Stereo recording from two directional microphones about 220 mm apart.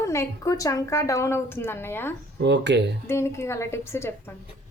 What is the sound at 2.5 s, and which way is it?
Speech, 50° right (ahead or behind).